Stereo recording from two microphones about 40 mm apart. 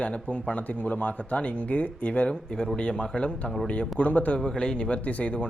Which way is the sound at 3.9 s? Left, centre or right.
Left.